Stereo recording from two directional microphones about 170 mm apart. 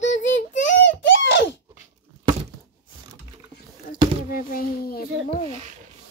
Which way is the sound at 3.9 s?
60° left (ahead or behind).